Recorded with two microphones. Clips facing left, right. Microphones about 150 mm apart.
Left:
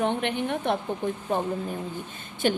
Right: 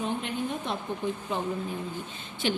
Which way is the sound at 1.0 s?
55° left (ahead or behind).